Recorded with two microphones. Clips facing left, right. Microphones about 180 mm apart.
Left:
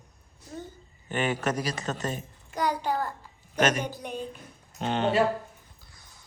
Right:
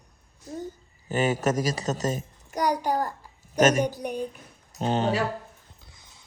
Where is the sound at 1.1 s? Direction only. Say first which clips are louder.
Right 4 dB; 40° right (ahead or behind).